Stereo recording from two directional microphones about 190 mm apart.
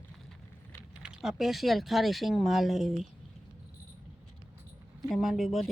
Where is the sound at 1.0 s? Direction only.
5° right (ahead or behind).